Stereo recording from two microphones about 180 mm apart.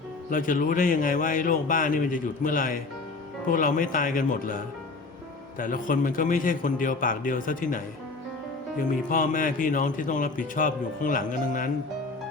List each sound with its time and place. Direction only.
0.3 s a man's voice: 50° left (ahead or behind)
8.8 s a man's voice: 50° left (ahead or behind)